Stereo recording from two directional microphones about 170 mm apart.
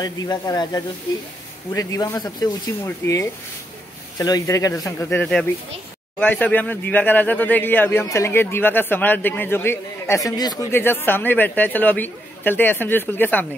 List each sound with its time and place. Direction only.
0.0 s speech: 25° left (ahead or behind)